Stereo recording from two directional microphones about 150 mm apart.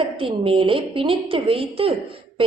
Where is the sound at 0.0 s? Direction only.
35° right (ahead or behind).